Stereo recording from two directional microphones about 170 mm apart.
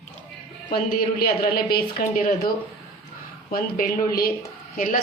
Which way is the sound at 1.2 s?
60° left (ahead or behind).